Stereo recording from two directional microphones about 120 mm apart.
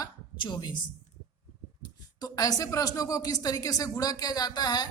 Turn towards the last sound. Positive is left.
turn(degrees=35)  # may be behind; listen again after turning